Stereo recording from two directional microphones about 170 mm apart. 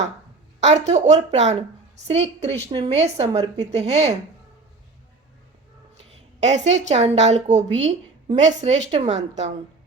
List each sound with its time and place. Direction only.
0.6 s a woman's voice: 40° right (ahead or behind)
6.0 s a woman's voice: 45° right (ahead or behind)